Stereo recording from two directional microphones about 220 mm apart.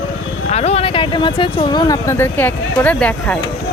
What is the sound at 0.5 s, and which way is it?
Speech, 30° left (ahead or behind).